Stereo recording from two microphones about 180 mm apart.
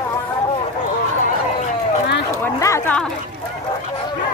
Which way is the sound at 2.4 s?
15° left (ahead or behind).